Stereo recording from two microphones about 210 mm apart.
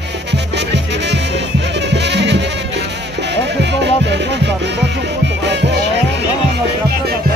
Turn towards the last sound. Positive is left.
turn(degrees=-55)  # may be behind; listen again after turning